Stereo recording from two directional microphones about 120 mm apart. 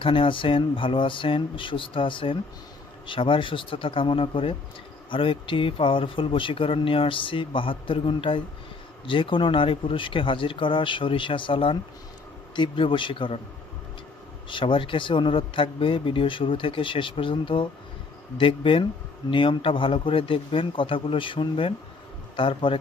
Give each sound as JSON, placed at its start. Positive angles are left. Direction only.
{"t": 0.0, "sound": "speech", "side_deg": 45}
{"t": 14.5, "sound": "speech", "side_deg": 45}